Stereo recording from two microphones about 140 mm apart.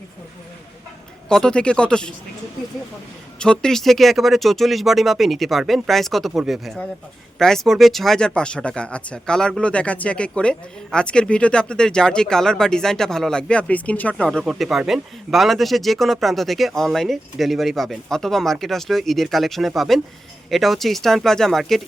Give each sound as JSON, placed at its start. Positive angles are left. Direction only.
{"t": 1.3, "sound": "speech", "side_deg": 5}
{"t": 3.3, "sound": "speech", "side_deg": 5}